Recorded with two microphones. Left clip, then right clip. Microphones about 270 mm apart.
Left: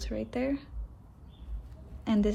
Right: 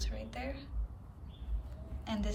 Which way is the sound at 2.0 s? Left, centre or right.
Left.